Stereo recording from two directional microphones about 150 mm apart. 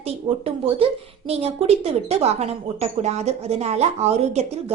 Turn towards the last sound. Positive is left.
turn(degrees=-45)  # may be behind; listen again after turning